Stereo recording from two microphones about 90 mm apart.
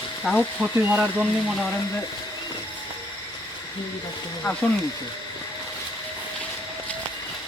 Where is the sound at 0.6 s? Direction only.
15° right (ahead or behind).